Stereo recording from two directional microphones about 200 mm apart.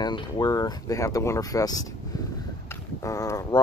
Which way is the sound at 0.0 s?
20° left (ahead or behind).